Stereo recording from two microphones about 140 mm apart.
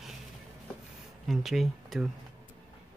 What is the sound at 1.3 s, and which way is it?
Speech, centre (ahead or behind).